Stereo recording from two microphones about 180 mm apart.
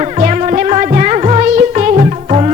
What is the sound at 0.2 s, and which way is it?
Music, 45° right (ahead or behind).